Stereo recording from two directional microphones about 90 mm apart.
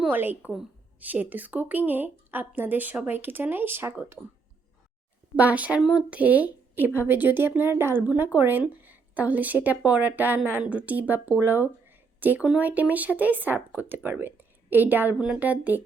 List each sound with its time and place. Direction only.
0.1 s a woman's voice: 20° right (ahead or behind)
5.4 s a woman's voice: 15° right (ahead or behind)